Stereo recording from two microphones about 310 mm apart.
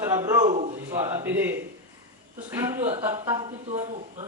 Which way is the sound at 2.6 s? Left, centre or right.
Centre.